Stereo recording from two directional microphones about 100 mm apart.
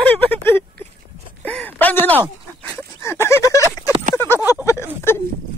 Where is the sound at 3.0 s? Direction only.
25° left (ahead or behind).